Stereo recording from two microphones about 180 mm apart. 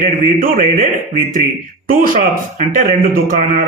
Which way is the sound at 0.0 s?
50° right (ahead or behind).